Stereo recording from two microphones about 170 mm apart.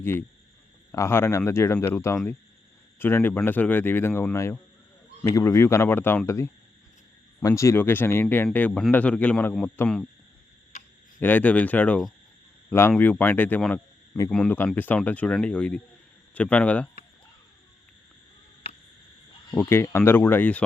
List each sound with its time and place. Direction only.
0.0 s speech: 15° left (ahead or behind)
11.2 s speech: 10° left (ahead or behind)
19.5 s speech: 15° left (ahead or behind)